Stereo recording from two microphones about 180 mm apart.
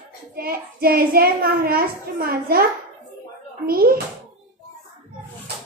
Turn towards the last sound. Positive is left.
turn(degrees=-55)  # may be behind; listen again after turning